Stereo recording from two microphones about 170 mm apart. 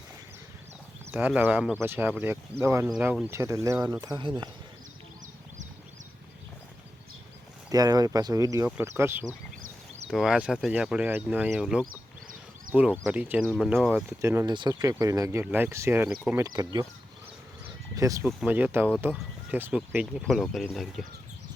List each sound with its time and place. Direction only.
1.1 s speech: 10° right (ahead or behind)
4.0 s speech: 25° right (ahead or behind)
7.7 s speech: 20° right (ahead or behind)
9.6 s a sound: 50° right (ahead or behind)
10.1 s speech: 5° right (ahead or behind)
14.2 s speech: 15° right (ahead or behind)
17.9 s speech: 20° right (ahead or behind)
18.3 s speech: 5° right (ahead or behind)